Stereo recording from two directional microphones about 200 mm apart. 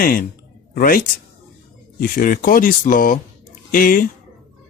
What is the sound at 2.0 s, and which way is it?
Speech, 45° left (ahead or behind).